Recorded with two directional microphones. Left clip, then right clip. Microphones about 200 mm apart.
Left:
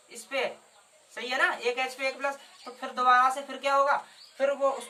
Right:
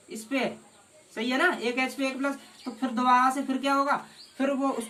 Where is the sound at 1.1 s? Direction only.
20° left (ahead or behind).